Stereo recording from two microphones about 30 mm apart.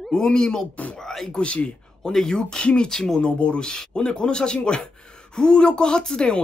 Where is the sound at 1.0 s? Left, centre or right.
Centre.